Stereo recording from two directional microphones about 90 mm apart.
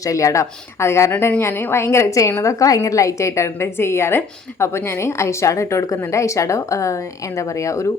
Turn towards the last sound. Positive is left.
turn(degrees=35)  # may be behind; listen again after turning